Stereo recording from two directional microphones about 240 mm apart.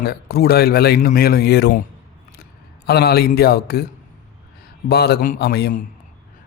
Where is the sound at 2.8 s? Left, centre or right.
Left.